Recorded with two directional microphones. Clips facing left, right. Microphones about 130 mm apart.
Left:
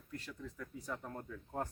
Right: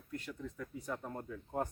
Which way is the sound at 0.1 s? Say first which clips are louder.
Right 3 dB; 5° right (ahead or behind).